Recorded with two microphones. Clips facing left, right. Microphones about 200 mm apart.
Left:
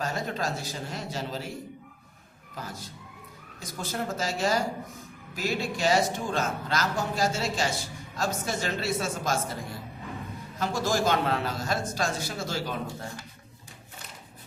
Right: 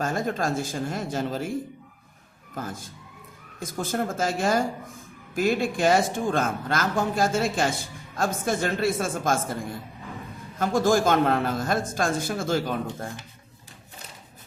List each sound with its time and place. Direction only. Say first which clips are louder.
0.0 s speech: right 4 dB; 50° right (ahead or behind)
2.6 s speech: right 5 dB; 50° right (ahead or behind)
10.6 s speech: right 6 dB; 50° right (ahead or behind)